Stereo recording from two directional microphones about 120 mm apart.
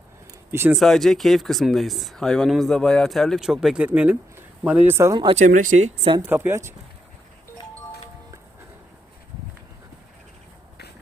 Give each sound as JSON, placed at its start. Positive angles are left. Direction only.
{"t": 0.7, "sound": "speech", "side_deg": 0}
{"t": 5.3, "sound": "speech", "side_deg": -90}
{"t": 6.2, "sound": "speech", "side_deg": -15}